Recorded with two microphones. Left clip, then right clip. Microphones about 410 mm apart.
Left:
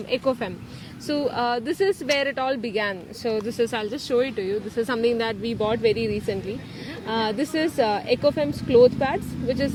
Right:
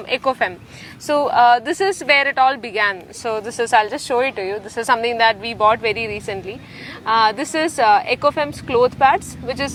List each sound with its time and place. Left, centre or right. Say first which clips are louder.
0.1 s a woman's voice: right 6 dB; right
3.7 s a woman's voice: right 10 dB; right